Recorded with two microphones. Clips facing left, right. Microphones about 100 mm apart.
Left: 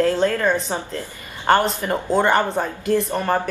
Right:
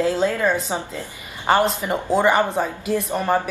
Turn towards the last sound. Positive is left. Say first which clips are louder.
# even
turn(degrees=-5)  # may be behind; listen again after turning